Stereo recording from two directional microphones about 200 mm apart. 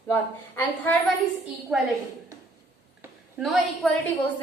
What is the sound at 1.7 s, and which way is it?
Speech, centre (ahead or behind).